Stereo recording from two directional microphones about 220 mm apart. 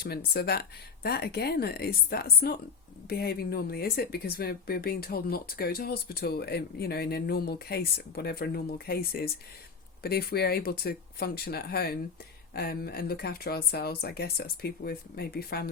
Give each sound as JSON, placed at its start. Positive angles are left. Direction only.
{"t": 0.0, "sound": "speech", "side_deg": 45}